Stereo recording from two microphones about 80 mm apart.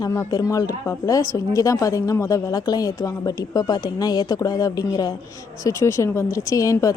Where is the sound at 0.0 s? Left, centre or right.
Left.